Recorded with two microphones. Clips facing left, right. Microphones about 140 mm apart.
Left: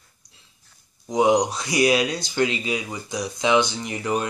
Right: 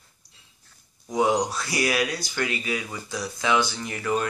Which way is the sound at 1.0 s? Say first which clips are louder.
Left 4 dB; 20° left (ahead or behind).